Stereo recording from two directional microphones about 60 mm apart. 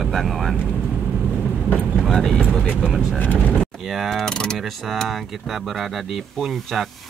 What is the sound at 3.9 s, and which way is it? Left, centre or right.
Speech, centre.